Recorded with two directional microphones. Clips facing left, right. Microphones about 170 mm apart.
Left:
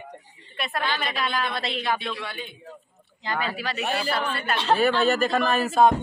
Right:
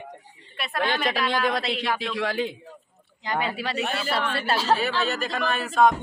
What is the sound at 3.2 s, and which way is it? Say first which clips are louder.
Speech: right 1 dB; 20° right (ahead or behind).